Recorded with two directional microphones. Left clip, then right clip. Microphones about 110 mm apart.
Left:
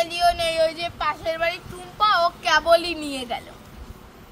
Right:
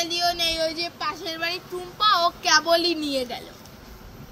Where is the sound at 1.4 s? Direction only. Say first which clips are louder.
Left 3 dB; 30° left (ahead or behind).